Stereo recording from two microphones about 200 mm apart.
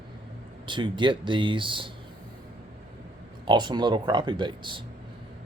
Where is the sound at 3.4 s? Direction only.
20° right (ahead or behind).